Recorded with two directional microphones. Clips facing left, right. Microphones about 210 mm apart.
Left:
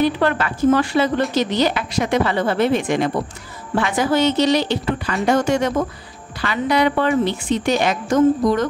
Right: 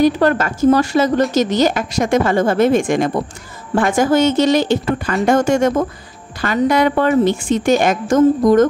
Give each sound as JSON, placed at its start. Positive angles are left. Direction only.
{"t": 0.0, "sound": "a woman's voice", "side_deg": -45}